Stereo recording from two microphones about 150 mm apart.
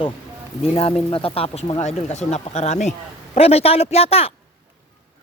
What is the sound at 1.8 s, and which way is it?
Speech, 50° left (ahead or behind).